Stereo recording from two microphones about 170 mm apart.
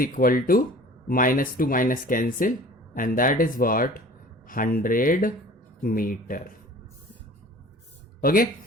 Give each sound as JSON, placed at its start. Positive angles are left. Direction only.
{"t": 0.0, "sound": "speech", "side_deg": 55}
{"t": 8.2, "sound": "speech", "side_deg": 55}